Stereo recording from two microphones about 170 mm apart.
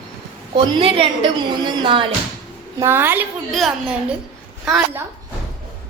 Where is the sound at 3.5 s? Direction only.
Centre (ahead or behind).